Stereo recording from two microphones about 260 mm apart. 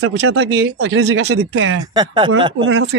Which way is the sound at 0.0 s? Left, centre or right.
Right.